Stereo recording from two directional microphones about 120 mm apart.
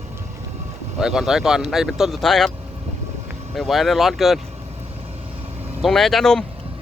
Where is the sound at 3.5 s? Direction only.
Centre (ahead or behind).